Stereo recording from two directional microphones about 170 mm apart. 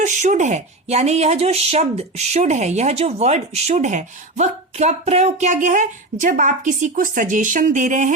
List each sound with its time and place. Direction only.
0.0 s speech: 45° right (ahead or behind)